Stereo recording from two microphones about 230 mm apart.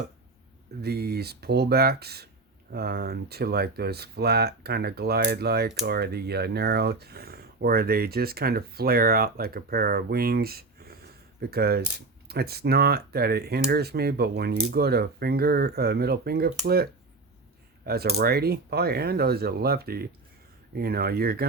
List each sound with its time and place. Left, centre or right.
0.8 s speech: right